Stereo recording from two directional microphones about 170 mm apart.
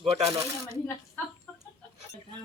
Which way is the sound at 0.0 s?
35° right (ahead or behind).